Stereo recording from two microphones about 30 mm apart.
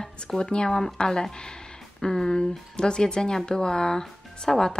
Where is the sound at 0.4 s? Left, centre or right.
Left.